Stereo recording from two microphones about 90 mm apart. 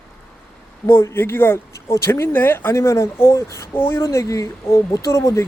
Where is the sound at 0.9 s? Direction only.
25° left (ahead or behind).